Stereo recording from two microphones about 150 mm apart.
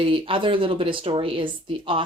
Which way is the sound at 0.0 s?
35° right (ahead or behind).